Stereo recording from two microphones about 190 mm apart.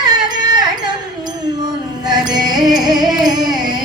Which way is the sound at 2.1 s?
20° right (ahead or behind).